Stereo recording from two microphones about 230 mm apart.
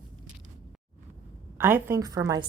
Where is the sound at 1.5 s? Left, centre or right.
Centre.